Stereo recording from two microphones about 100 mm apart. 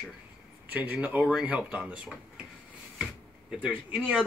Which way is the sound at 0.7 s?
15° right (ahead or behind).